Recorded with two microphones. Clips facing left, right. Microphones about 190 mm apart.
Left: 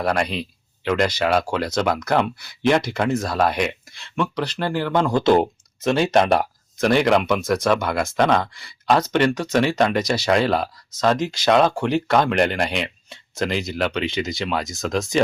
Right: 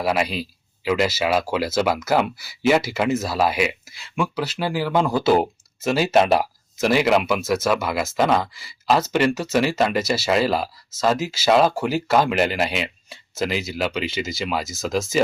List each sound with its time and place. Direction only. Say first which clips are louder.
0.0 s speech: even; 5° right (ahead or behind)